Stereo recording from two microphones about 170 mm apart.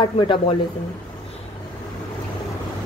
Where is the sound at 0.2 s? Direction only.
30° left (ahead or behind).